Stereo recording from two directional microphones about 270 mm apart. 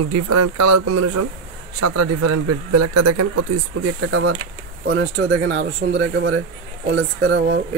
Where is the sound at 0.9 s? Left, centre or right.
Right.